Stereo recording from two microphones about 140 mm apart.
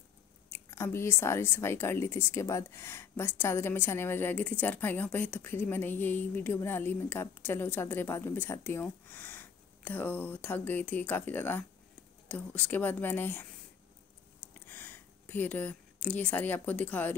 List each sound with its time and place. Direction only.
0.5 s speech: 20° left (ahead or behind)
14.7 s speech: 15° left (ahead or behind)